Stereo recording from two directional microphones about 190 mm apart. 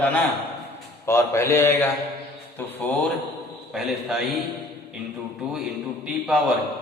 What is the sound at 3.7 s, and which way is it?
Speech, centre (ahead or behind).